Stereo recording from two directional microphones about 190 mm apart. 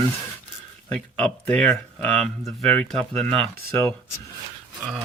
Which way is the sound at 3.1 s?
35° right (ahead or behind).